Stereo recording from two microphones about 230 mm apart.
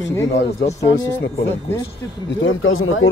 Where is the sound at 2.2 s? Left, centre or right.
Left.